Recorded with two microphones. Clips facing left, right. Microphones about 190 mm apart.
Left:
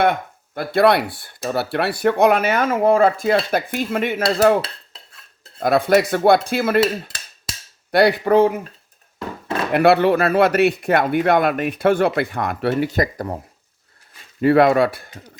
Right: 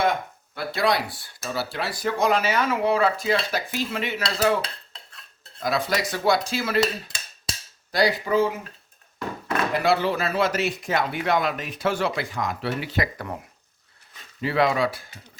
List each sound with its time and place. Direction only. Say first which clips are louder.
0.0 s speech: left 5 dB; 55° left (ahead or behind)
7.9 s speech: left 7 dB; 65° left (ahead or behind)
9.7 s speech: left 9 dB; 60° left (ahead or behind); by 13.4 s 35° left (ahead or behind)
14.4 s speech: left 8 dB; 55° left (ahead or behind)